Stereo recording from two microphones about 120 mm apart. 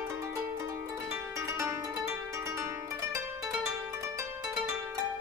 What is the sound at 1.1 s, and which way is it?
Music, 20° right (ahead or behind).